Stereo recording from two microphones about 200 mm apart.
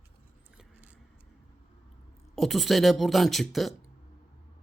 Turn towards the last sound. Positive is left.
turn(degrees=0)  # may be behind; listen again after turning